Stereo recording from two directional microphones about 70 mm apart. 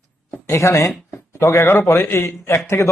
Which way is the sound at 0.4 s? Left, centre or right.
Left.